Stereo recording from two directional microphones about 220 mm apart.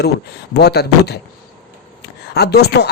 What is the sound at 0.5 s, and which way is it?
Speech, 50° left (ahead or behind).